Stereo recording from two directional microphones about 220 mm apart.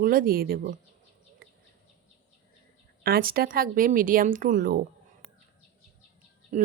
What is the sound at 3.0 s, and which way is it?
Speech, 40° right (ahead or behind).